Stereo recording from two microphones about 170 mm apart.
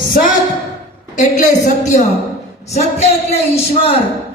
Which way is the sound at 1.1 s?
45° left (ahead or behind).